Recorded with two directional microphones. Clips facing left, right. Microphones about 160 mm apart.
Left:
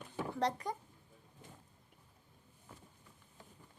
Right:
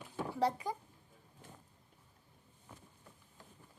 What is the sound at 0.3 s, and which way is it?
Speech, 5° right (ahead or behind).